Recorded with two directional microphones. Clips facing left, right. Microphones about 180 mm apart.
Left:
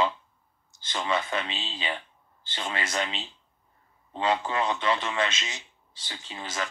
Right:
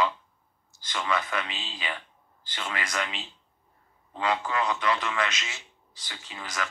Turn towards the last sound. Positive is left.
turn(degrees=25)  # may be behind; listen again after turning